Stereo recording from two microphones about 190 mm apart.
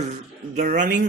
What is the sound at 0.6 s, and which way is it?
Speech, 40° right (ahead or behind).